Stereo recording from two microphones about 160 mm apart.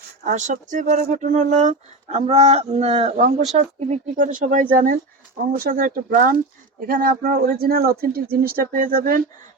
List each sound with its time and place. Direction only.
0.3 s speech: 50° right (ahead or behind)